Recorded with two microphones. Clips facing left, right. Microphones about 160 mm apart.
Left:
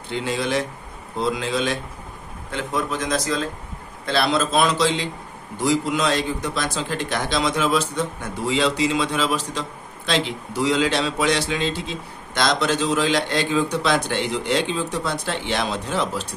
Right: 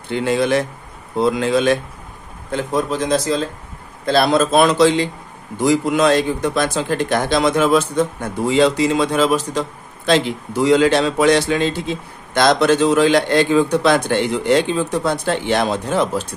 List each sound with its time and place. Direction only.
0.1 s speech: 55° right (ahead or behind)
2.5 s speech: 35° right (ahead or behind)
4.0 s a man's voice: 45° right (ahead or behind)